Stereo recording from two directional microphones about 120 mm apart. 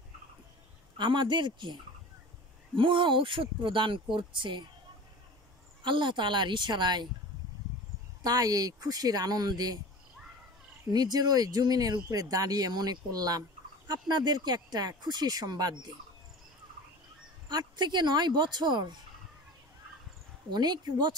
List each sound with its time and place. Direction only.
0.9 s speech: 40° right (ahead or behind)
5.8 s speech: 45° right (ahead or behind)
8.2 s speech: 30° right (ahead or behind)
10.9 s speech: 35° right (ahead or behind)
17.5 s speech: 35° right (ahead or behind)
20.5 s speech: 35° right (ahead or behind)